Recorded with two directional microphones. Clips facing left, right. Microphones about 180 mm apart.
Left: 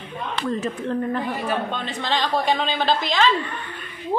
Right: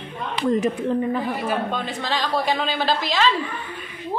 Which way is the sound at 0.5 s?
20° right (ahead or behind).